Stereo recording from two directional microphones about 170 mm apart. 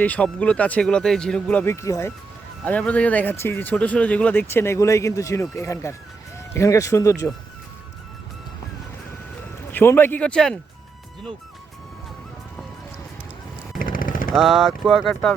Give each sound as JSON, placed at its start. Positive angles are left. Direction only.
{"t": 0.0, "sound": "speech", "side_deg": 10}
{"t": 9.7, "sound": "speech", "side_deg": 10}
{"t": 13.7, "sound": "vehicle", "side_deg": 55}
{"t": 14.3, "sound": "speech", "side_deg": 0}